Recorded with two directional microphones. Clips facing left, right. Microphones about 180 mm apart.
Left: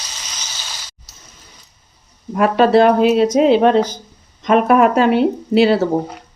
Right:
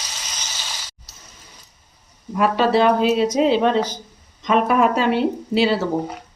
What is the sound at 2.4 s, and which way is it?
Speech, 55° left (ahead or behind).